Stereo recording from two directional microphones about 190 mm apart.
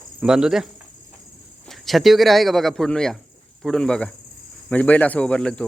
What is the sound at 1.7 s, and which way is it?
A man's voice, centre (ahead or behind).